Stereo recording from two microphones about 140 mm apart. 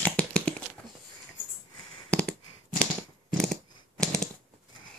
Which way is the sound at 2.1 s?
10° left (ahead or behind).